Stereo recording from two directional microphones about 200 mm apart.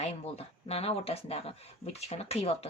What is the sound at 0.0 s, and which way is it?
Speech, 30° left (ahead or behind).